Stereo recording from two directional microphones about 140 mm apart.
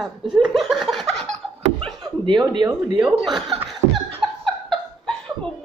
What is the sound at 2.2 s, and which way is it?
Speech, 35° right (ahead or behind).